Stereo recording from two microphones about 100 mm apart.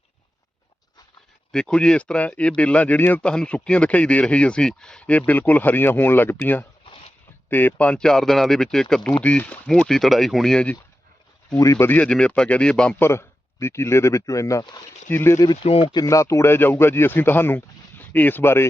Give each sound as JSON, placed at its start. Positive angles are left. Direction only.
{"t": 1.5, "sound": "speech", "side_deg": 10}
{"t": 9.6, "sound": "speech", "side_deg": 5}
{"t": 11.5, "sound": "speech", "side_deg": 30}
{"t": 11.9, "sound": "speech", "side_deg": 10}
{"t": 13.0, "sound": "speech", "side_deg": 25}
{"t": 15.4, "sound": "speech", "side_deg": 65}
{"t": 16.0, "sound": "speech", "side_deg": 30}